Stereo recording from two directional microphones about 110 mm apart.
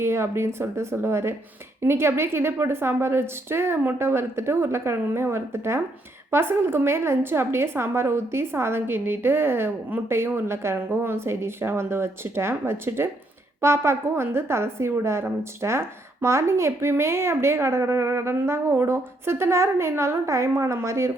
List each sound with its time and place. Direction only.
0.0 s a woman's voice: 25° right (ahead or behind)